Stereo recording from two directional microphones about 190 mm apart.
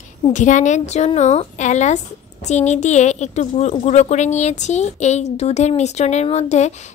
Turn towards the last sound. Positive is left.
turn(degrees=35)  # may be behind; listen again after turning